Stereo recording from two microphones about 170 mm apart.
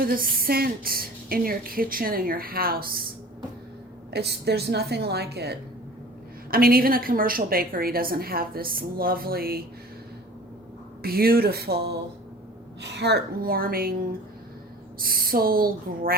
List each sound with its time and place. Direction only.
0.0 s a woman's voice: 55° right (ahead or behind)
4.1 s a woman's voice: 70° right (ahead or behind)
6.5 s a woman's voice: 60° right (ahead or behind)
11.0 s a woman's voice: 65° right (ahead or behind)
12.8 s a woman's voice: 85° right; by 16.1 s 60° right (ahead or behind)